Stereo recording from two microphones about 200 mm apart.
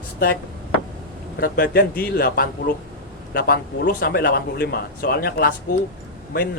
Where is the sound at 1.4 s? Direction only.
50° left (ahead or behind).